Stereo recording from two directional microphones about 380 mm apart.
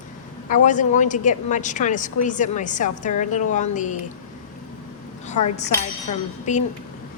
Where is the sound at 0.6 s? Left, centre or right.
Centre.